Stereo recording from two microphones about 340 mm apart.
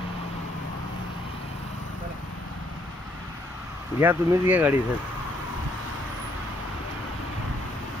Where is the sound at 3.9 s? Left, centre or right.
Centre.